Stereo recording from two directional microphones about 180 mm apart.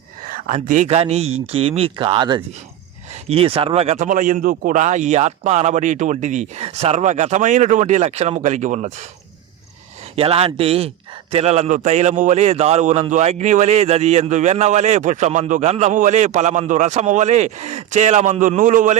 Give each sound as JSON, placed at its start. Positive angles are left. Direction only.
{"t": 0.3, "sound": "a man's voice", "side_deg": -45}
{"t": 10.2, "sound": "a man's voice", "side_deg": -35}